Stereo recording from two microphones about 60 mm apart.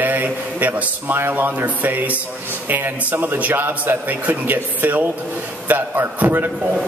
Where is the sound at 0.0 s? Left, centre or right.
Right.